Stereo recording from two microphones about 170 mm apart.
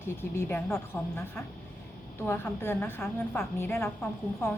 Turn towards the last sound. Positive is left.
turn(degrees=10)  # may be behind; listen again after turning